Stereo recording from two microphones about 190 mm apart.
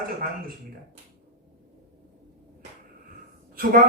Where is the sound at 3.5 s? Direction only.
50° right (ahead or behind).